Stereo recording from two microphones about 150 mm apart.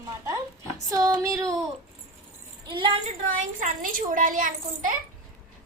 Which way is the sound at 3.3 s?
60° right (ahead or behind).